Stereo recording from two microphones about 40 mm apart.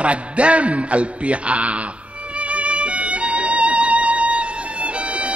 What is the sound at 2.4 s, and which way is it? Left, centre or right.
Music, right.